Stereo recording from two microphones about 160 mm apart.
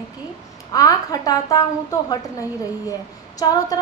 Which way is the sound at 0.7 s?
20° left (ahead or behind).